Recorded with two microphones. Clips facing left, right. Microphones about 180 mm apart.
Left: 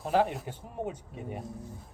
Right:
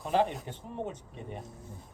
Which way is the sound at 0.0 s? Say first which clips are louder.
Left 1 dB; centre (ahead or behind).